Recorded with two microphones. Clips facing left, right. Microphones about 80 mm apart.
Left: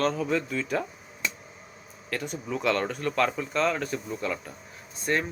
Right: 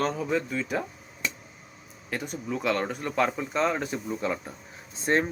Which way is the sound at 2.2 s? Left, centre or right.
Centre.